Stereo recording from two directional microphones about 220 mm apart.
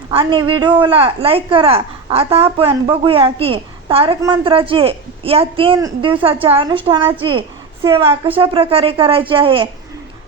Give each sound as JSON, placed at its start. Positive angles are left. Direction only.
{"t": 0.1, "sound": "speech", "side_deg": -25}